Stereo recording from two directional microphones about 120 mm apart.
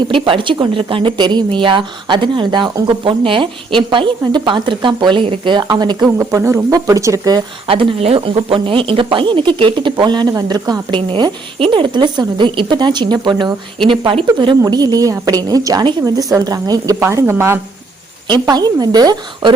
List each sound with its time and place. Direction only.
0.1 s speech: 45° right (ahead or behind); by 7.4 s 30° right (ahead or behind)
7.7 s a woman's voice: 45° right (ahead or behind); by 17.6 s 20° right (ahead or behind)
18.3 s speech: 35° right (ahead or behind)